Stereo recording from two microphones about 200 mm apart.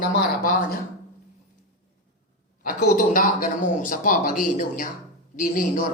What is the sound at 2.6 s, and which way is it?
A woman's voice, 45° left (ahead or behind).